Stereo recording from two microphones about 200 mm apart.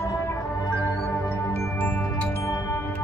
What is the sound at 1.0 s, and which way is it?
Music, 10° left (ahead or behind).